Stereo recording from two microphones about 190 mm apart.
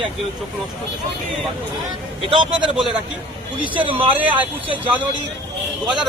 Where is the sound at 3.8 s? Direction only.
25° right (ahead or behind).